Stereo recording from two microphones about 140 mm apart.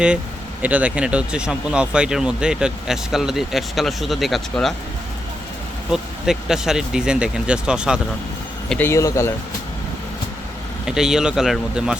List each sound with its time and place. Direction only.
0.6 s speech: 10° right (ahead or behind)
5.9 s speech: 5° right (ahead or behind)
8.8 s speech: 20° left (ahead or behind)
10.8 s speech: 5° right (ahead or behind)